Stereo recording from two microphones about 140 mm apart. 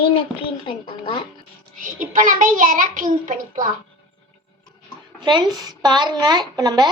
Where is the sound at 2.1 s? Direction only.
70° right (ahead or behind).